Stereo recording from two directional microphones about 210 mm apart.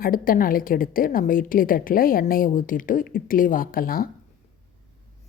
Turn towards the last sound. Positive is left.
turn(degrees=45)  # may be behind; listen again after turning